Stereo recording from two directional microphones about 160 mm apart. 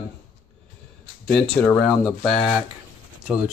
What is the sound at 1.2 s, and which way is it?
Speech, 5° left (ahead or behind).